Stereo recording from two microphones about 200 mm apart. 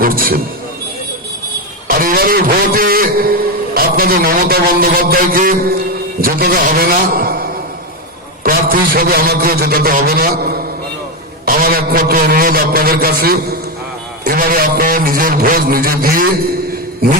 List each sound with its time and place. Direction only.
0.0 s a man's voice: 45° right (ahead or behind)
2.0 s a man's voice: 45° right (ahead or behind)
8.4 s a man's voice: 45° right (ahead or behind)